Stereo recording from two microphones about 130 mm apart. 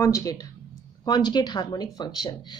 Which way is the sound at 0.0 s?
25° left (ahead or behind).